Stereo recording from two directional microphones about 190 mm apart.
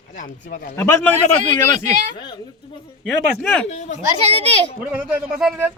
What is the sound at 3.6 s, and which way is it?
Speech, 35° left (ahead or behind).